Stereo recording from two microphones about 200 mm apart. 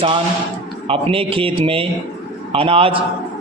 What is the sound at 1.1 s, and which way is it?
A man's voice, 25° right (ahead or behind).